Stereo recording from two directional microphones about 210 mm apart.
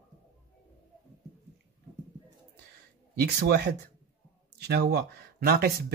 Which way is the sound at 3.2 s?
50° right (ahead or behind).